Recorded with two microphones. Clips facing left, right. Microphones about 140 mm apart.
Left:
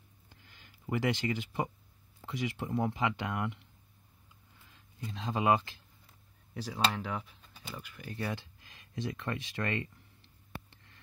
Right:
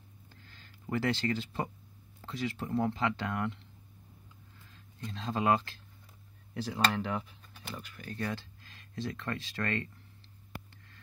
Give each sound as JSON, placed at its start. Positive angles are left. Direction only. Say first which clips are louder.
{"t": 0.3, "sound": "a sound", "louder": "right 1 dB", "side_deg": 15}
{"t": 2.2, "sound": "speech", "louder": "even", "side_deg": 15}
{"t": 5.0, "sound": "speech", "louder": "even", "side_deg": 15}
{"t": 6.5, "sound": "speech", "louder": "right 2 dB", "side_deg": 0}
{"t": 8.0, "sound": "speech", "louder": "even", "side_deg": 20}